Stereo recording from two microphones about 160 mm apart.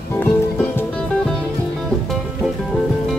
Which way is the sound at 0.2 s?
10° left (ahead or behind).